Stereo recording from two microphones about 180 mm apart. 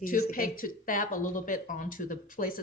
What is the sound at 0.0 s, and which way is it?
Speech, 50° left (ahead or behind).